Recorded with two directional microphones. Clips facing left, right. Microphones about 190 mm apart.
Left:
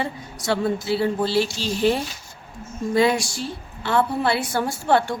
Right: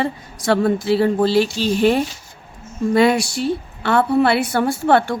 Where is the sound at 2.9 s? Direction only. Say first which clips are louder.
Right 4 dB; 65° right (ahead or behind).